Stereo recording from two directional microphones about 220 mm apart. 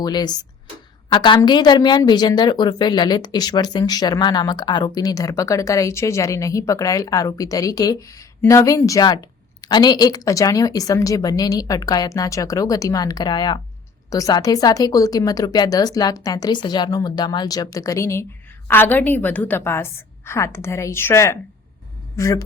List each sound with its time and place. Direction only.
0.0 s a woman's voice: 20° left (ahead or behind)